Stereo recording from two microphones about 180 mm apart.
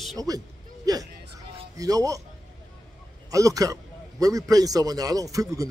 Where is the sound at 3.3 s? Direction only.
20° right (ahead or behind).